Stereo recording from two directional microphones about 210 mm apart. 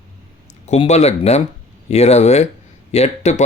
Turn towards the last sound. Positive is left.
turn(degrees=30)  # may be behind; listen again after turning